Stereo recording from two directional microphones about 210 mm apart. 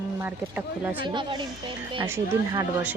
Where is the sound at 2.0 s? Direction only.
10° right (ahead or behind).